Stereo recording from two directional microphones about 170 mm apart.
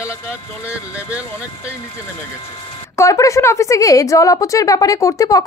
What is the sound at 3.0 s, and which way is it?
A woman's voice, 20° left (ahead or behind).